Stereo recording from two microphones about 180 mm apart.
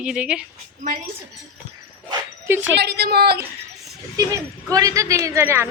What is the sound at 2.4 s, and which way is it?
Speech, 15° right (ahead or behind).